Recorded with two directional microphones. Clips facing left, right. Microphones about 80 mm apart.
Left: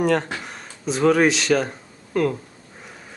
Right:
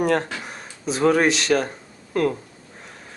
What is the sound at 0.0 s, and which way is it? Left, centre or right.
Speech, centre.